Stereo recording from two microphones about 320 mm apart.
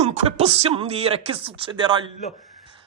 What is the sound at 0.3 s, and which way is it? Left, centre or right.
Speech, centre.